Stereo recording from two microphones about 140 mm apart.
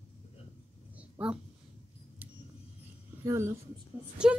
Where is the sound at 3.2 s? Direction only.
20° right (ahead or behind).